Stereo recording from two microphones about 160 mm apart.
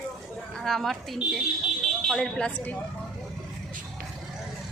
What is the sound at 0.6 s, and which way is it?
A woman's voice, centre (ahead or behind).